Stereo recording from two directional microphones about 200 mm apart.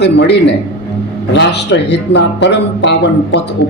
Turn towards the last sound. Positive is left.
turn(degrees=65)  # may be behind; listen again after turning